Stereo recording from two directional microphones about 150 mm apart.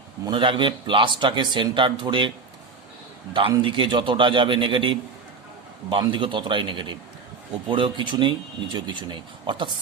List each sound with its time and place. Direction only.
0.3 s speech: 35° right (ahead or behind)
3.6 s speech: 35° right (ahead or behind)